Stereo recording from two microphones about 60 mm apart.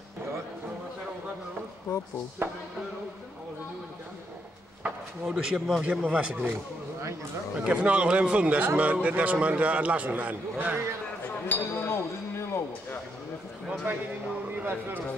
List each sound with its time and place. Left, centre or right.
1.9 s speech: left
2.4 s speech: right
5.2 s a man's voice: centre
5.8 s a man's voice: right
7.6 s a man's voice: centre
11.2 s chink: left
11.7 s speech: left
14.6 s speech: right